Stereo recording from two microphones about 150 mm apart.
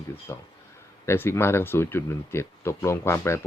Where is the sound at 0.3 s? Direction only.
20° left (ahead or behind).